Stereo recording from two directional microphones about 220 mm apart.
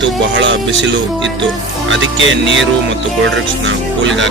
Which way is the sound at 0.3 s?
55° right (ahead or behind).